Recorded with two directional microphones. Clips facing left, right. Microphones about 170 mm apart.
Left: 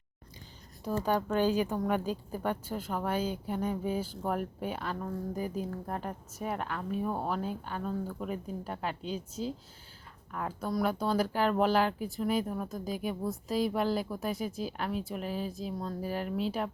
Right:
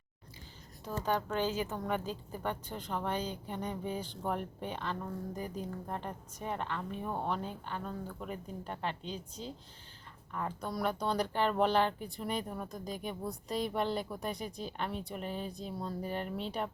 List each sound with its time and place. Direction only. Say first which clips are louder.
0.9 s speech: left 4 dB; 10° left (ahead or behind)